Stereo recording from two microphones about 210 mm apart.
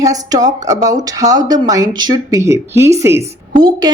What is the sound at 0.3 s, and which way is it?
A woman's voice, 15° right (ahead or behind).